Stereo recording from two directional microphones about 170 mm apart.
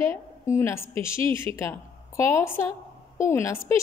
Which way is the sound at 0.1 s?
15° left (ahead or behind).